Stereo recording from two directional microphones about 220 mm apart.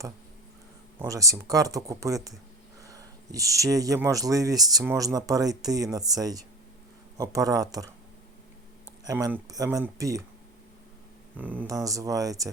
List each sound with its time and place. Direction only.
0.9 s speech: 15° right (ahead or behind)
9.0 s speech: 10° right (ahead or behind)
11.3 s speech: 5° right (ahead or behind)